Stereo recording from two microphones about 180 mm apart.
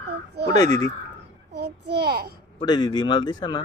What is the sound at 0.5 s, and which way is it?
Speech, 20° left (ahead or behind).